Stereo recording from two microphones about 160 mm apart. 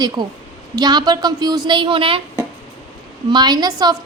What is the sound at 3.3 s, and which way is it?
Speech, 25° right (ahead or behind).